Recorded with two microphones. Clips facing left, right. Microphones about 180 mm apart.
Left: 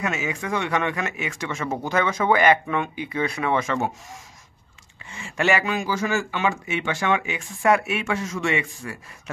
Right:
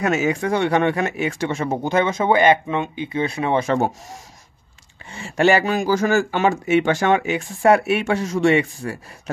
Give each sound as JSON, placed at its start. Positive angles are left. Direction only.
{"t": 0.0, "sound": "speech", "side_deg": -40}